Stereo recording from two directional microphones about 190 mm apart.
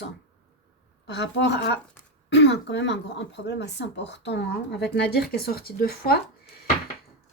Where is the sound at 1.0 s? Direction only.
65° left (ahead or behind).